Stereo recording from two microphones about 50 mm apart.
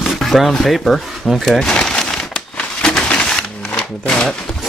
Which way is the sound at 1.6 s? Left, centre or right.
Centre.